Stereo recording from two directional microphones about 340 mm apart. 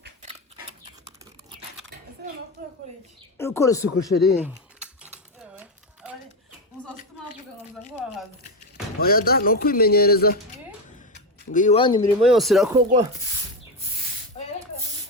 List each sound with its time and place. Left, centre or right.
0.0 s dog: right
3.3 s speech: centre
4.2 s speech: centre
9.0 s speech: left
11.5 s speech: centre
12.2 s speech: centre
14.3 s a sound: centre